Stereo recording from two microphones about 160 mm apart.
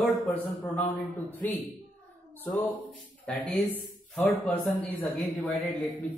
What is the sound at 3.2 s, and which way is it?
Speech, 10° left (ahead or behind).